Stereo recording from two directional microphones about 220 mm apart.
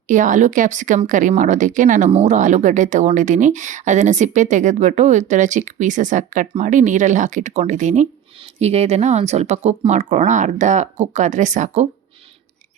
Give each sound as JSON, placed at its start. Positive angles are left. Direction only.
{"t": 0.1, "sound": "a woman's voice", "side_deg": -35}